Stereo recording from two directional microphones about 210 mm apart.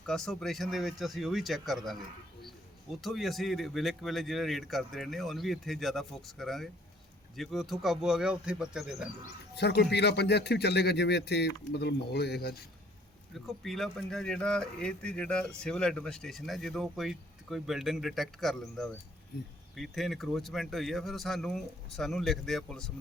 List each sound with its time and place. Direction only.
0.0 s speech: 5° left (ahead or behind)
9.6 s a man's voice: 50° left (ahead or behind)
13.3 s speech: centre (ahead or behind)